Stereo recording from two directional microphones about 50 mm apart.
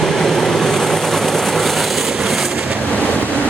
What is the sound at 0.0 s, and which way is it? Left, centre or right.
Vehicle, centre.